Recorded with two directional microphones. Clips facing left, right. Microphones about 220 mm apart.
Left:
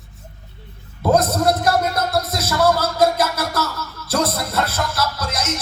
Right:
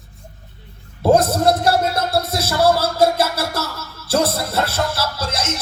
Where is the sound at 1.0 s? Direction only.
30° right (ahead or behind).